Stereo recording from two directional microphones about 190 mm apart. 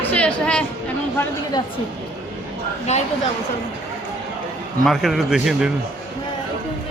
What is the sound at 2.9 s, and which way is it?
Speech, 35° left (ahead or behind).